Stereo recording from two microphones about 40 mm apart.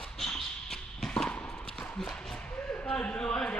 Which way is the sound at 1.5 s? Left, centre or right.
Centre.